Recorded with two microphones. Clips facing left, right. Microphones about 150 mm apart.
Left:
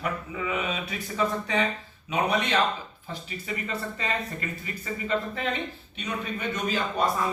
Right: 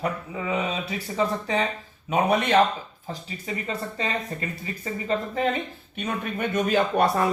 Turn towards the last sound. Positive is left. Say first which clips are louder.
# right 5 dB
turn(degrees=-70)  # may be behind; listen again after turning